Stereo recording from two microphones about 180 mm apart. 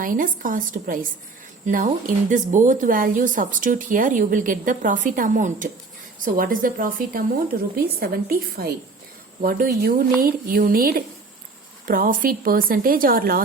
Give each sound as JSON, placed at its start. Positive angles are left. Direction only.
{"t": 0.0, "sound": "a woman's voice", "side_deg": -50}